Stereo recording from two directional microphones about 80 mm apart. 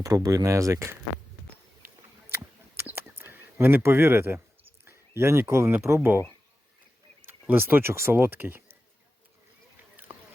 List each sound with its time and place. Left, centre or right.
0.0 s speech: right
2.9 s a sound: right
4.9 s speech: right
7.4 s speech: right